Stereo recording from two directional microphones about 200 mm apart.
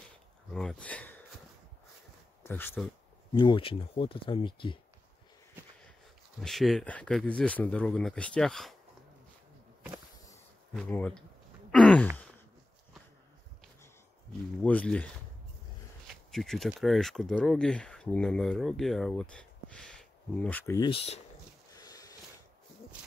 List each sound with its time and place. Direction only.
0.5 s speech: 5° left (ahead or behind)
2.4 s speech: 10° left (ahead or behind)
3.3 s speech: 25° left (ahead or behind)
6.4 s speech: centre (ahead or behind)
10.7 s speech: 5° left (ahead or behind)
11.7 s a sound: 5° left (ahead or behind)
14.6 s speech: 5° left (ahead or behind)
16.3 s speech: centre (ahead or behind)
20.9 s speech: 30° left (ahead or behind)
21.7 s a sound: 20° left (ahead or behind)